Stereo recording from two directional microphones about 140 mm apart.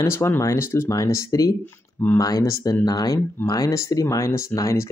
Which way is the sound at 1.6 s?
15° left (ahead or behind).